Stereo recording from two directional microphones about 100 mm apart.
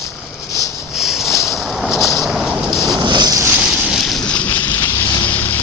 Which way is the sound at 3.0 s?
45° right (ahead or behind).